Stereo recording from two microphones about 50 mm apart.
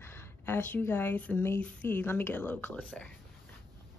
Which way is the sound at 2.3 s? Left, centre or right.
Left.